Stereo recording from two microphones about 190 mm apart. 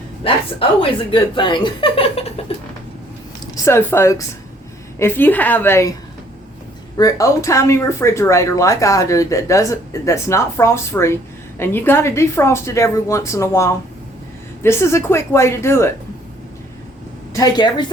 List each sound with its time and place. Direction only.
0.3 s speech: 30° left (ahead or behind)
3.4 s speech: 15° left (ahead or behind)
6.9 s speech: 20° left (ahead or behind)
17.3 s speech: 20° left (ahead or behind)